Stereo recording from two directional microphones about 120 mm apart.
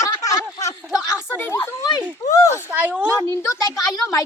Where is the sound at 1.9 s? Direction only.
30° left (ahead or behind).